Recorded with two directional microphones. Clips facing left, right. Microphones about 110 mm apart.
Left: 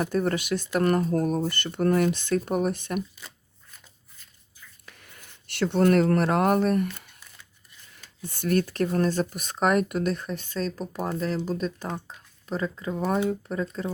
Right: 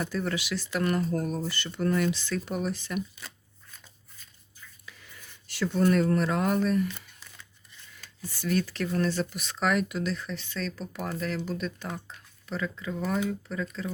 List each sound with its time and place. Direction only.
0.0 s speech: 45° left (ahead or behind)
3.2 s shuffling cards: 10° left (ahead or behind)
4.9 s speech: 55° left (ahead or behind)
8.3 s speech: 55° left (ahead or behind); by 13.9 s 35° left (ahead or behind)